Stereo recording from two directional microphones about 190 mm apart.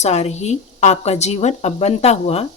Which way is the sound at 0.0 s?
35° left (ahead or behind).